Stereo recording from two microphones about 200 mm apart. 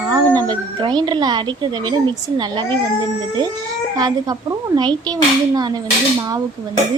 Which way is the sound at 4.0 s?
20° right (ahead or behind).